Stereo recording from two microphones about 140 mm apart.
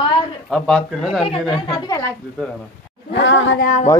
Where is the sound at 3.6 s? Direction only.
60° left (ahead or behind).